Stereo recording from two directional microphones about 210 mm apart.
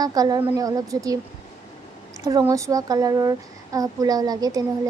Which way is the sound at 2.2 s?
15° right (ahead or behind).